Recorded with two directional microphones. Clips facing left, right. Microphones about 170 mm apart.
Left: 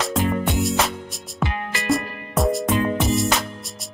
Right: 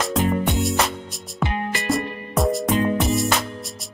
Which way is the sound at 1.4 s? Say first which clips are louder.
Right 2 dB; 20° right (ahead or behind).